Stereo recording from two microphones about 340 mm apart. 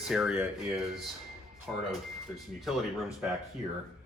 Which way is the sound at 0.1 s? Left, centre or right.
Centre.